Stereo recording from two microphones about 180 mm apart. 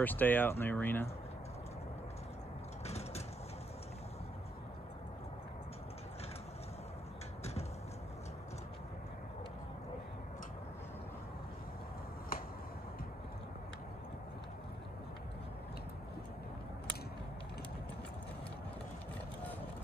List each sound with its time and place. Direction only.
0.0 s speech: 10° left (ahead or behind)
2.8 s vehicle: 35° left (ahead or behind)